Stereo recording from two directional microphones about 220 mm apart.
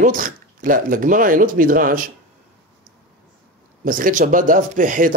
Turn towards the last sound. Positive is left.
turn(degrees=-40)  # may be behind; listen again after turning